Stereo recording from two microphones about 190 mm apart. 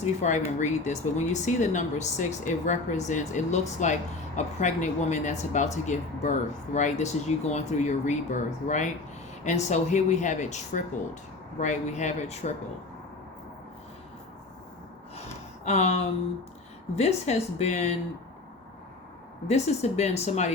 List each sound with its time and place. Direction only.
0.0 s speech: 40° left (ahead or behind)
15.6 s speech: 35° left (ahead or behind)
19.5 s speech: 35° left (ahead or behind)